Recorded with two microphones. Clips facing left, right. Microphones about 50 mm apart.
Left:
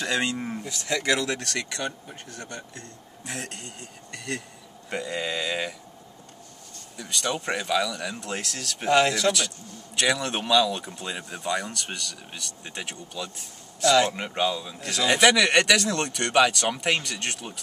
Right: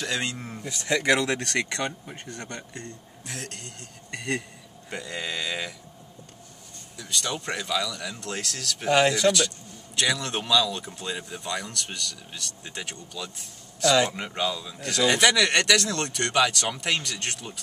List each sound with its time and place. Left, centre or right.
0.0 s speech: centre
0.7 s speech: right
2.3 s speech: right
3.3 s speech: centre
4.1 s a man's voice: right
4.8 s speech: centre
7.0 s speech: centre
8.9 s speech: centre
9.9 s speech: centre